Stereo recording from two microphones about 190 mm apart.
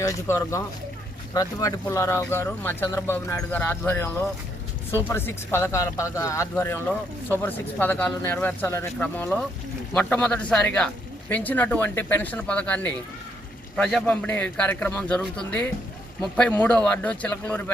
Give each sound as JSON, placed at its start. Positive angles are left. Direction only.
{"t": 0.0, "sound": "speech", "side_deg": 15}